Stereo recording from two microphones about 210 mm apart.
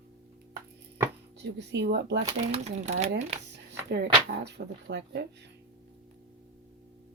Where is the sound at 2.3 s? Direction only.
30° right (ahead or behind).